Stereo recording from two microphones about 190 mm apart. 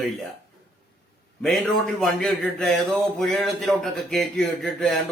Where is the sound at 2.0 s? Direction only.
Centre (ahead or behind).